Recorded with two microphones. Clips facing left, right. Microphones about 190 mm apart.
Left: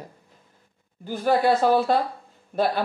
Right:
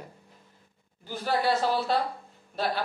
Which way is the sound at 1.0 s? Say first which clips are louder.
Left 7 dB; 55° left (ahead or behind).